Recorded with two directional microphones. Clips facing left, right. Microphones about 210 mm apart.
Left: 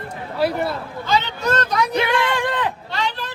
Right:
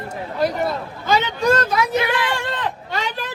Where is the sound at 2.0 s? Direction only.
25° left (ahead or behind).